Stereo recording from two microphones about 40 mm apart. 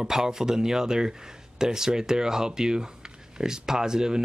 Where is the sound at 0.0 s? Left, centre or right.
Centre.